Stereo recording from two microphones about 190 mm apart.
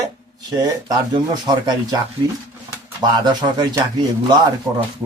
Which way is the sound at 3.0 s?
25° right (ahead or behind).